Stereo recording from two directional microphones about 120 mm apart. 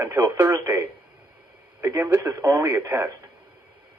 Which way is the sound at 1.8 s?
20° right (ahead or behind).